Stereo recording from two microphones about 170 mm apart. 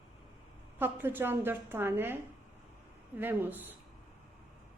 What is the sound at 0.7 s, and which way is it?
Speech, 10° right (ahead or behind).